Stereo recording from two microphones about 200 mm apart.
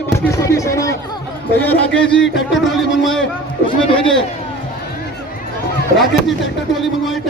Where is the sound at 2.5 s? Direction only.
Centre (ahead or behind).